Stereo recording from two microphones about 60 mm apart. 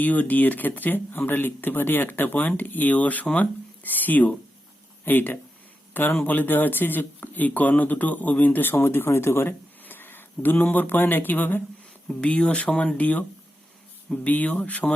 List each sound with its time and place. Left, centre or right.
0.0 s speech: left
12.0 s speech: centre